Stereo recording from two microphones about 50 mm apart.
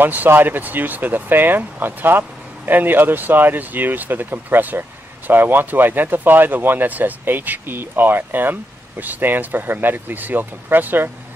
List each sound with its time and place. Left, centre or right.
0.0 s speech: right